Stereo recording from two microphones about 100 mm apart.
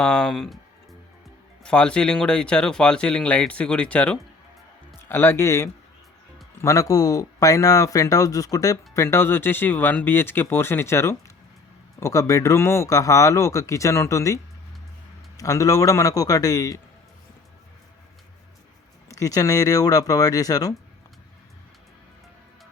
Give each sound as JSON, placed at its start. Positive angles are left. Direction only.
{"t": 0.0, "sound": "speech", "side_deg": 5}
{"t": 1.6, "sound": "speech", "side_deg": 10}
{"t": 4.9, "sound": "speech", "side_deg": 25}
{"t": 19.0, "sound": "speech", "side_deg": 35}